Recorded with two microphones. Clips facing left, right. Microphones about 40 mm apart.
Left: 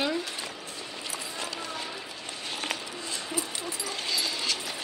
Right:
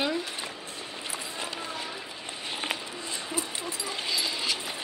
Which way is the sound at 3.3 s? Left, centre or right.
Right.